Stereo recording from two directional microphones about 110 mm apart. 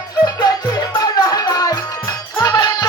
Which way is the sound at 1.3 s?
35° left (ahead or behind).